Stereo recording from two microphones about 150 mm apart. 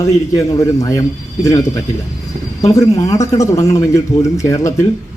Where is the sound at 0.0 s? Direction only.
20° left (ahead or behind).